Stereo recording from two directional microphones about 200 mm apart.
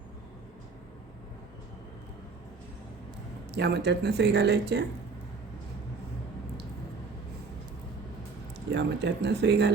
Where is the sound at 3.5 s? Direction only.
55° right (ahead or behind).